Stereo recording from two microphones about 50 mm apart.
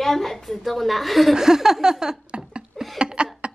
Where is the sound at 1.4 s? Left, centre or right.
Centre.